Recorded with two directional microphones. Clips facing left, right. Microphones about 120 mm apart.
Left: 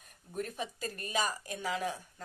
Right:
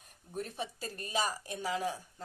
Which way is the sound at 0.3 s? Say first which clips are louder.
Left 1 dB; 30° right (ahead or behind).